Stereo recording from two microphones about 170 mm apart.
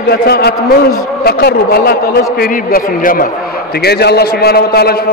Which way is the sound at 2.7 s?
55° left (ahead or behind).